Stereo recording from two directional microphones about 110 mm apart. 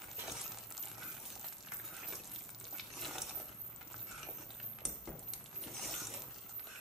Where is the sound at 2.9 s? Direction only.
Centre (ahead or behind).